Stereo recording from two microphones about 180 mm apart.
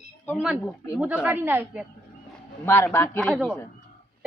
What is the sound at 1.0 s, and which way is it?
Speech, 5° right (ahead or behind).